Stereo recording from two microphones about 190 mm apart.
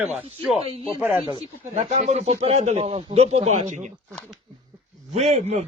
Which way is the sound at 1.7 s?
35° right (ahead or behind).